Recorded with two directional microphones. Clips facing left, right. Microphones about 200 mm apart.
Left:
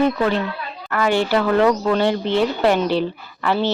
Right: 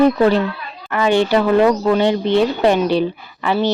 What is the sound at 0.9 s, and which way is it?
Speech, 20° right (ahead or behind).